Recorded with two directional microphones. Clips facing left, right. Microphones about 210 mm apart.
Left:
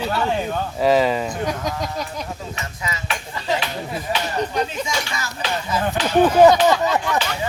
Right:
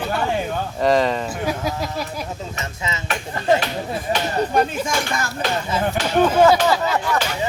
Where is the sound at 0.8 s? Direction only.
5° left (ahead or behind).